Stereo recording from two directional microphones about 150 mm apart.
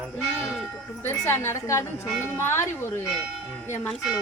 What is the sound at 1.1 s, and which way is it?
A woman's voice, 15° left (ahead or behind).